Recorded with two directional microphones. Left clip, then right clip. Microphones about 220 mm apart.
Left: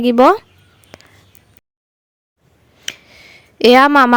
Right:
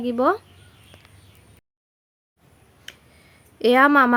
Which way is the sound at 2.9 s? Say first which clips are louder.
Left 14 dB; 40° left (ahead or behind).